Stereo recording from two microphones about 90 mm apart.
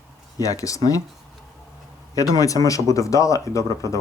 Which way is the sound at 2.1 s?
40° left (ahead or behind).